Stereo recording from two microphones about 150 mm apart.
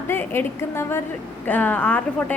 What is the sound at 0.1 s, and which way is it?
A woman's voice, 15° left (ahead or behind).